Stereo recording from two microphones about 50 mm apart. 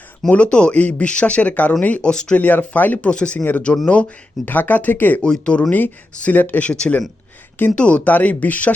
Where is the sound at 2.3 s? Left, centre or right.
Left.